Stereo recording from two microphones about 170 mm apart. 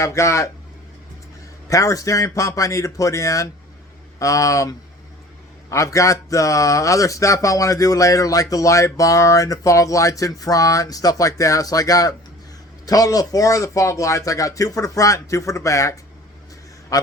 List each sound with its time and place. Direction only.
0.0 s speech: 15° left (ahead or behind)
1.7 s speech: 20° left (ahead or behind)